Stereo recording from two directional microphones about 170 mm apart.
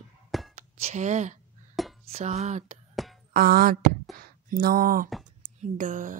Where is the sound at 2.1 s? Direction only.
40° right (ahead or behind).